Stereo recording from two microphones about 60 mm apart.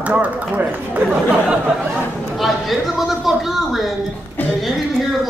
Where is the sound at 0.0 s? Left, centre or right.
Right.